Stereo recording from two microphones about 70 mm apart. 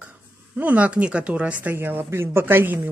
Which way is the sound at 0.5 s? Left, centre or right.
Right.